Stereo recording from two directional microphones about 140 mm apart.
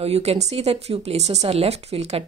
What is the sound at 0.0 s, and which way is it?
A woman's voice, 45° right (ahead or behind).